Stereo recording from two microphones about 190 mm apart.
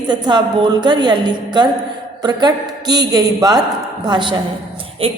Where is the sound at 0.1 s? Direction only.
25° right (ahead or behind).